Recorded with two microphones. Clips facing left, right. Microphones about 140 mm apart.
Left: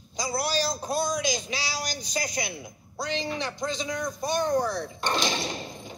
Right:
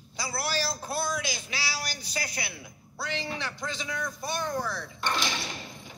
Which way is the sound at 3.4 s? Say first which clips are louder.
Left 5 dB; 20° left (ahead or behind).